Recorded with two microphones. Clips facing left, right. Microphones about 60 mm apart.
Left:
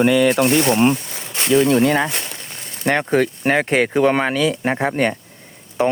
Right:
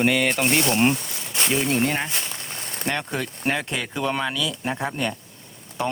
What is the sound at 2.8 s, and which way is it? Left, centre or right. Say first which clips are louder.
Speech: left 10 dB; left.